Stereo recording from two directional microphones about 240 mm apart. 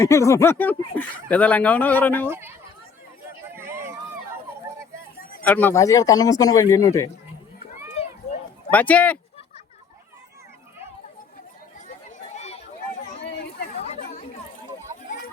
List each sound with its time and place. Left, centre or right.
0.0 s speech: centre
3.5 s run: centre
5.4 s speech: centre
8.7 s speech: centre
12.3 s a sound: left
13.1 s a sound: left
13.7 s chatter: left